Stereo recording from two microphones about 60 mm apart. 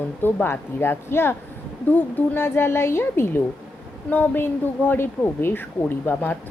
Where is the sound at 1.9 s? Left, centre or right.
Left.